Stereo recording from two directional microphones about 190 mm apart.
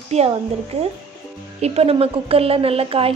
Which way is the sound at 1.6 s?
30° right (ahead or behind).